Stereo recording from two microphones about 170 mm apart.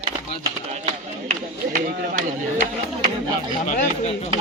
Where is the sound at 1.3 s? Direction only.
45° right (ahead or behind).